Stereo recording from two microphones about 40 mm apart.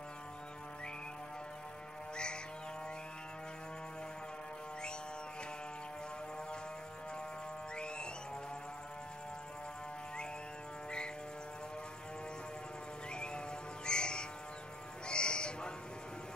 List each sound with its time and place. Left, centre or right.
7.7 s music: left
13.1 s music: left
13.8 s a sound: left
15.0 s sheep: left